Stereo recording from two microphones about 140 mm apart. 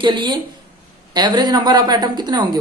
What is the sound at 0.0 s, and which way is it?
Speech, 35° right (ahead or behind).